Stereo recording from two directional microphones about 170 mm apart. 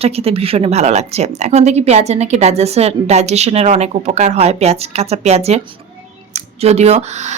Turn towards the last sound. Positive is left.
turn(degrees=-40)  # may be behind; listen again after turning